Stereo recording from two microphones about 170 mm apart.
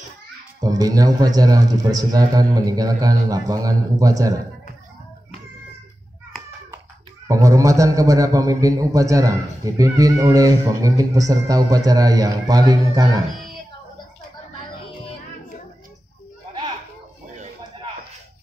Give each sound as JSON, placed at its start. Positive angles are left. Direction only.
{"t": 0.7, "sound": "a man's voice", "side_deg": -20}
{"t": 7.2, "sound": "a man's voice", "side_deg": -20}